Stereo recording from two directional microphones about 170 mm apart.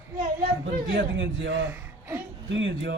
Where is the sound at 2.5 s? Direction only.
90° right.